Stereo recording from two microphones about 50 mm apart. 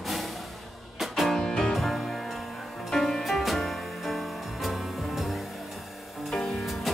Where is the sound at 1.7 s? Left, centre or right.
Centre.